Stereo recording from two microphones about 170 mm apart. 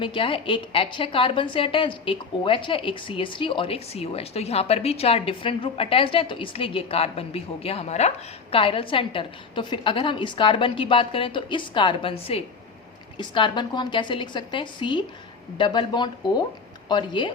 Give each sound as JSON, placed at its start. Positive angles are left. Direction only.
{"t": 0.0, "sound": "a woman's voice", "side_deg": 30}